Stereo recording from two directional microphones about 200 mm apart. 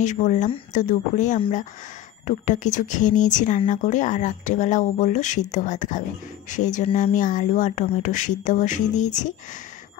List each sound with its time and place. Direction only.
0.0 s speech: 35° left (ahead or behind)